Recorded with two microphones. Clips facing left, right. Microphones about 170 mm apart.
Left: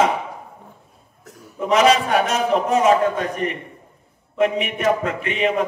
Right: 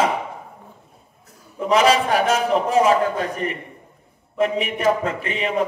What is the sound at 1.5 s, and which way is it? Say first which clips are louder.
A man's voice: left 1 dB; 30° right (ahead or behind).